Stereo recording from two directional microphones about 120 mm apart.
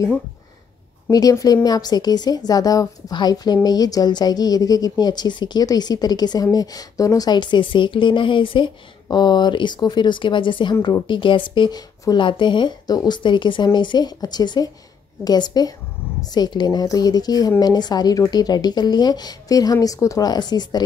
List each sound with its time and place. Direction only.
1.1 s speech: 30° left (ahead or behind)